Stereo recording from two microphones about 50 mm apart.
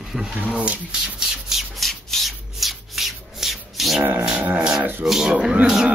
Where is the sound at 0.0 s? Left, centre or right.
Centre.